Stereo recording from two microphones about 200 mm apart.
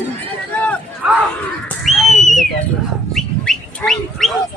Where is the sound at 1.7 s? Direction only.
Centre (ahead or behind).